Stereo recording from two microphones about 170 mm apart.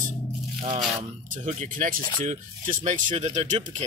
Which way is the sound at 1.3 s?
45° right (ahead or behind).